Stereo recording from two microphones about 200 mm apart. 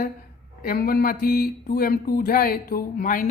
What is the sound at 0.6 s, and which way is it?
Speech, 45° left (ahead or behind).